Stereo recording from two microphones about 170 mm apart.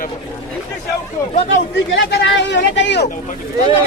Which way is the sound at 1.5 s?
90° left.